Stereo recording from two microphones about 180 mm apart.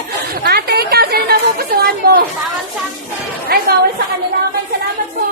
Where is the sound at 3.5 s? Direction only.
60° right (ahead or behind).